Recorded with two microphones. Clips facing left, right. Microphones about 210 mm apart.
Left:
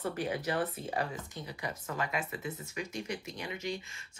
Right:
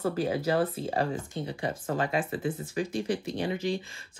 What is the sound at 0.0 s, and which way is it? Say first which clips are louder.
Speech: right 6 dB; 30° right (ahead or behind).